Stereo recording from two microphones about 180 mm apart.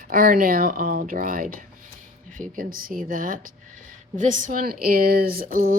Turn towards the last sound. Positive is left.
turn(degrees=-55)  # may be behind; listen again after turning